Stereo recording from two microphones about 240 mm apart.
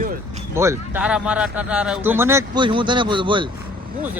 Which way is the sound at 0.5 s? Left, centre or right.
Centre.